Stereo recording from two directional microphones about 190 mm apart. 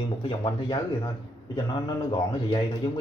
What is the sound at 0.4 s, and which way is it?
A man's voice, 25° left (ahead or behind).